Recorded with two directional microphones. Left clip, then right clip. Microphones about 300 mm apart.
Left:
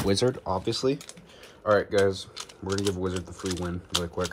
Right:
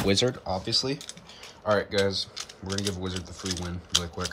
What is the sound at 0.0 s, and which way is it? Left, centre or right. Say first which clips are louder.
Speech: even; centre.